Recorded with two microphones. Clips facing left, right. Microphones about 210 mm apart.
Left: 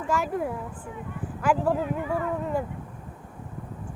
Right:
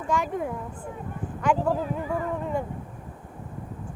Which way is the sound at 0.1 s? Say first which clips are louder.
Even; 5° left (ahead or behind).